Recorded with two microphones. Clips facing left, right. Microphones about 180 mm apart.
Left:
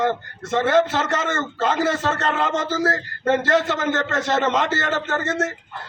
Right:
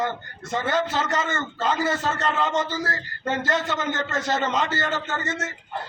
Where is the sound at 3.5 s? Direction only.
65° left (ahead or behind).